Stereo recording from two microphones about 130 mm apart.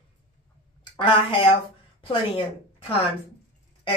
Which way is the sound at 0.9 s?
40° left (ahead or behind).